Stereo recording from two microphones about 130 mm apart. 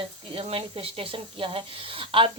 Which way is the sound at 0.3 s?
50° right (ahead or behind).